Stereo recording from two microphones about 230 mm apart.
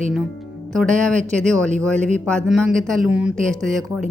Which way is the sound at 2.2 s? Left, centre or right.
Centre.